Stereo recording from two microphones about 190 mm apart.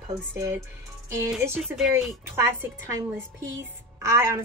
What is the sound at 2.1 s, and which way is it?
Speech, 15° right (ahead or behind).